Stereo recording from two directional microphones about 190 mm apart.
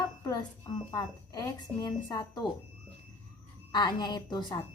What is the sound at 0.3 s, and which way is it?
Speech, 20° left (ahead or behind).